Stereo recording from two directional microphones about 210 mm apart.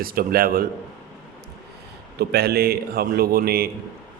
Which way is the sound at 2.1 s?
50° right (ahead or behind).